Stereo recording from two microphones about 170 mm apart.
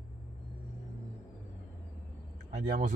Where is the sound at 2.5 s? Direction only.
45° right (ahead or behind).